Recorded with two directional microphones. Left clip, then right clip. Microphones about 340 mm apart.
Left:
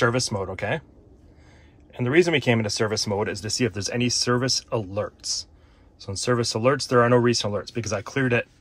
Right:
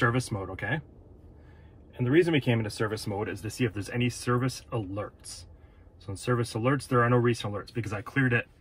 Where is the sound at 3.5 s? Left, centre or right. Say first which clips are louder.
Left 6 dB; centre.